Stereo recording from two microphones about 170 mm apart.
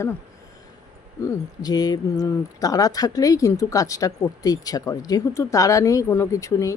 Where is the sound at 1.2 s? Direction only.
20° left (ahead or behind).